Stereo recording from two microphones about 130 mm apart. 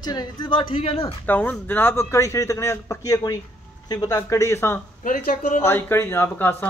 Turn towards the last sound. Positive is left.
turn(degrees=15)  # may be behind; listen again after turning